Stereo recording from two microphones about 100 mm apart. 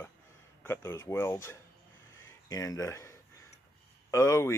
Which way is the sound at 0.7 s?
25° left (ahead or behind).